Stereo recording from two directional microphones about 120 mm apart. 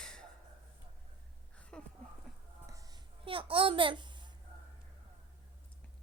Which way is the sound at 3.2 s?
50° right (ahead or behind).